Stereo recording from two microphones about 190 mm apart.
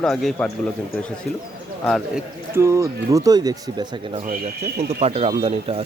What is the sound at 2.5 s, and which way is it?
A man's voice, 15° right (ahead or behind).